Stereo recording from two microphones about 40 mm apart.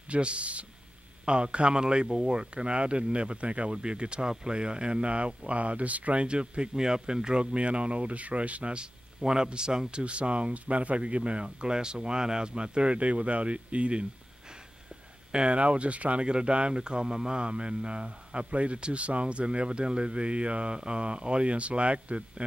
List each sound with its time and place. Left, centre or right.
0.1 s speech: right
9.2 s speech: centre
15.3 s speech: right